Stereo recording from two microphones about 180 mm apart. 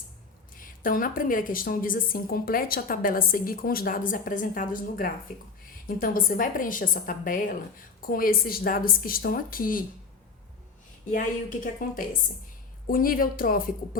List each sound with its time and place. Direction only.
0.5 s a woman's voice: 50° left (ahead or behind)
11.1 s a woman's voice: 50° left (ahead or behind)